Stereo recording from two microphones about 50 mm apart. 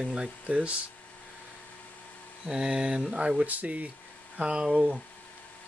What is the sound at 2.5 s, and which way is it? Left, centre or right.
Speech, centre.